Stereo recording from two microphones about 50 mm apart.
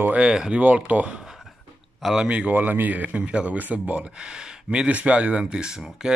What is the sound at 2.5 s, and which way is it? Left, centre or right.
Speech, right.